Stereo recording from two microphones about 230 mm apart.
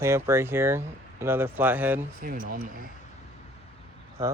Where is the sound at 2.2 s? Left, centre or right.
Right.